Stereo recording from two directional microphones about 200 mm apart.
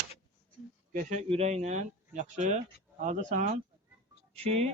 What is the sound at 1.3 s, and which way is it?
Speech, 30° right (ahead or behind).